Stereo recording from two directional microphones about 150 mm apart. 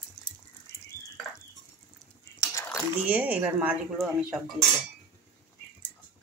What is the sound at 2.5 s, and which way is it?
Dishes, 20° left (ahead or behind).